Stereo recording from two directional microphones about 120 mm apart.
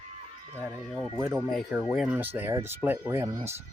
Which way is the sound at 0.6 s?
5° left (ahead or behind).